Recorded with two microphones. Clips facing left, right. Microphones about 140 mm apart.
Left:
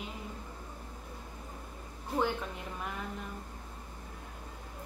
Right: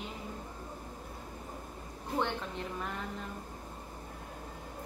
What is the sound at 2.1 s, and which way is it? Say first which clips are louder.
Speech: left 2 dB; 5° left (ahead or behind).